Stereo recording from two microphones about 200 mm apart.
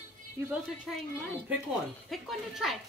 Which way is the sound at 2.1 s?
Centre (ahead or behind).